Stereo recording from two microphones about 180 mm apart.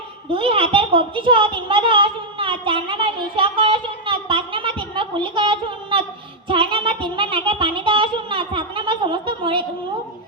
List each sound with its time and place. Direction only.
0.3 s a woman's voice: 30° right (ahead or behind)
6.5 s music: 30° right (ahead or behind)